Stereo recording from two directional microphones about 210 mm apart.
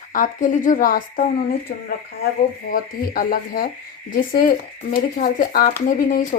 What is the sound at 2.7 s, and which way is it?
Speech, 45° left (ahead or behind).